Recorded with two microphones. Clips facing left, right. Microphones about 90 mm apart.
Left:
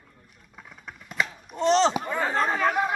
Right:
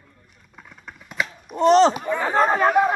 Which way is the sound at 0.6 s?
5° left (ahead or behind).